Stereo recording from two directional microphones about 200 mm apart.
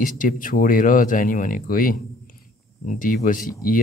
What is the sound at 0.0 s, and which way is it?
Speech, 40° left (ahead or behind).